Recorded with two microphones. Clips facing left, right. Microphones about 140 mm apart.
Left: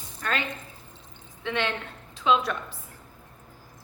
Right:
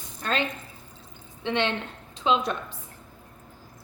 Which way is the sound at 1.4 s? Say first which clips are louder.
Right 3 dB; 25° right (ahead or behind).